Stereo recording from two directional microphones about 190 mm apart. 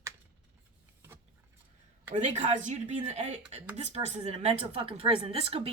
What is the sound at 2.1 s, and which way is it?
Speech, 40° right (ahead or behind).